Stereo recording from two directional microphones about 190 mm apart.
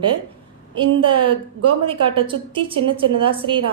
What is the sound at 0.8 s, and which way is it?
A woman's voice, 25° right (ahead or behind).